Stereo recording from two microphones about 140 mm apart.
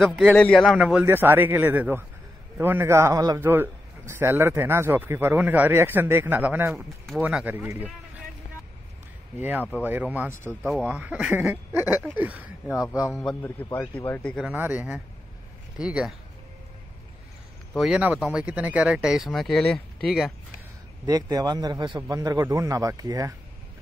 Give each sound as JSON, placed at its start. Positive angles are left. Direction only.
{"t": 0.2, "sound": "a man's voice", "side_deg": 5}
{"t": 9.4, "sound": "a man's voice", "side_deg": -10}
{"t": 13.7, "sound": "speech", "side_deg": 15}
{"t": 14.5, "sound": "a man's voice", "side_deg": -10}
{"t": 17.7, "sound": "speech", "side_deg": -5}
{"t": 21.0, "sound": "a man's voice", "side_deg": -25}